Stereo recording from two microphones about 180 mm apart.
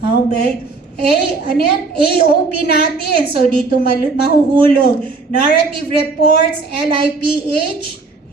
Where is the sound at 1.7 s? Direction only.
60° left (ahead or behind).